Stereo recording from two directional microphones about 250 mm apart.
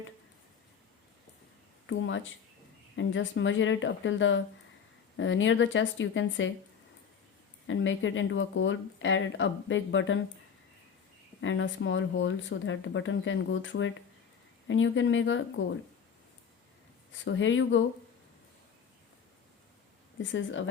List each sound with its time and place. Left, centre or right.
1.9 s speech: left
7.7 s speech: left
11.3 s speech: left
17.1 s speech: left
20.3 s speech: left